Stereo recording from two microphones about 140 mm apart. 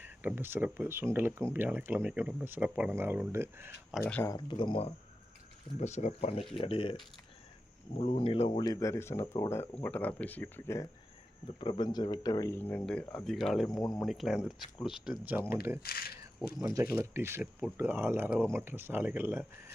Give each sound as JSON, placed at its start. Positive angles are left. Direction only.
{"t": 0.0, "sound": "speech", "side_deg": -15}
{"t": 4.0, "sound": "speech", "side_deg": 15}
{"t": 4.4, "sound": "speech", "side_deg": 35}
{"t": 5.8, "sound": "speech", "side_deg": 55}
{"t": 7.9, "sound": "speech", "side_deg": 45}
{"t": 8.6, "sound": "speech", "side_deg": 25}
{"t": 11.6, "sound": "speech", "side_deg": 35}
{"t": 12.5, "sound": "speech", "side_deg": 10}
{"t": 13.7, "sound": "speech", "side_deg": 25}
{"t": 14.0, "sound": "speech", "side_deg": 0}
{"t": 15.8, "sound": "speech", "side_deg": 90}
{"t": 16.9, "sound": "speech", "side_deg": -20}